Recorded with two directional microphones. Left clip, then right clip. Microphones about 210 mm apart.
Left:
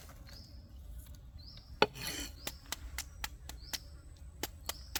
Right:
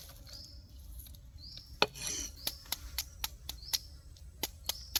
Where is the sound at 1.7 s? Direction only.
45° left (ahead or behind).